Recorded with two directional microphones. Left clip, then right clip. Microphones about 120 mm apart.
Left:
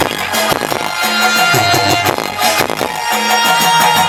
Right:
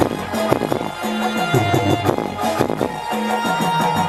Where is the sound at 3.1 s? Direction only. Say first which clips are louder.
Left 10 dB; 15° left (ahead or behind).